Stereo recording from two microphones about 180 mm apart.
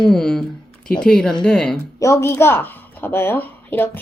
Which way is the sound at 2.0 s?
15° left (ahead or behind).